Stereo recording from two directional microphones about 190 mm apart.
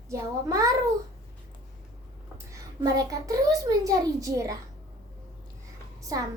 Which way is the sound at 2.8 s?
20° right (ahead or behind).